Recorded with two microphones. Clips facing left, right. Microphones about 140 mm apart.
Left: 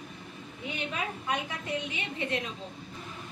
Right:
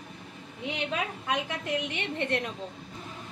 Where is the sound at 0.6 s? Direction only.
90° right; by 2.4 s 60° right (ahead or behind).